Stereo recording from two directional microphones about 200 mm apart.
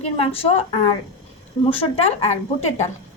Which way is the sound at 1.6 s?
30° left (ahead or behind).